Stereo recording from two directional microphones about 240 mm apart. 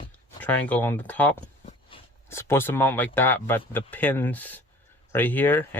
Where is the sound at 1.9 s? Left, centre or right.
Left.